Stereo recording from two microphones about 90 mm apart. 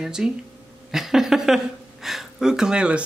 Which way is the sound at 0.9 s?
5° right (ahead or behind).